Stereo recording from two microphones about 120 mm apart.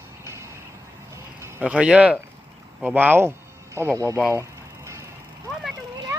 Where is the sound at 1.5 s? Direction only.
10° right (ahead or behind); by 4.2 s 25° right (ahead or behind).